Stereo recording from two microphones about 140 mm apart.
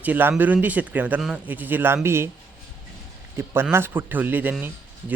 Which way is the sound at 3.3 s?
15° right (ahead or behind).